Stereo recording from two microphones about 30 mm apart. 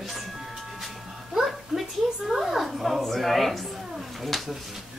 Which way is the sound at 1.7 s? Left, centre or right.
Centre.